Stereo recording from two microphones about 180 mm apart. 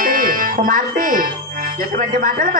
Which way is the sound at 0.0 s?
50° right (ahead or behind).